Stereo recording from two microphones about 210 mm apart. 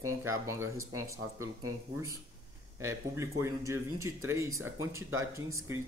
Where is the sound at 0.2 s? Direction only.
10° right (ahead or behind).